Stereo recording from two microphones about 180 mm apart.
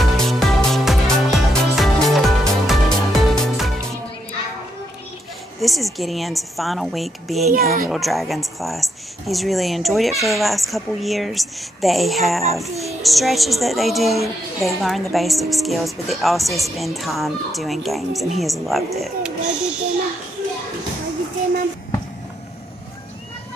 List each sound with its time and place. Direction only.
0.0 s music: centre (ahead or behind)
5.6 s speech: centre (ahead or behind)
7.5 s a child's voice: 55° right (ahead or behind)
7.9 s speech: centre (ahead or behind)